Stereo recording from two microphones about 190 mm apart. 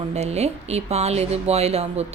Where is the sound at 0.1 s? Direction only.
35° right (ahead or behind).